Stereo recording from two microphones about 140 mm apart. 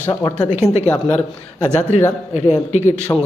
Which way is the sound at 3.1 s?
20° left (ahead or behind).